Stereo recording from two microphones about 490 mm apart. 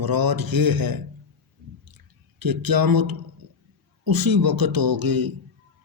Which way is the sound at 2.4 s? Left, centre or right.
Right.